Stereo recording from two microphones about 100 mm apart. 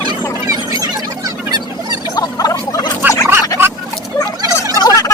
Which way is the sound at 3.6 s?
25° right (ahead or behind).